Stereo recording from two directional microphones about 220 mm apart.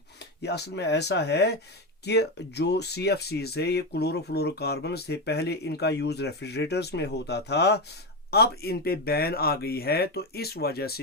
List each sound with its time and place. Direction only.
0.2 s speech: 50° left (ahead or behind)